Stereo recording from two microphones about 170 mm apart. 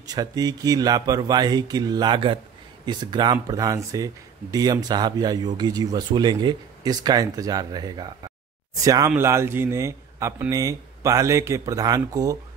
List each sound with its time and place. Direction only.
0.0 s a man's voice: 20° right (ahead or behind)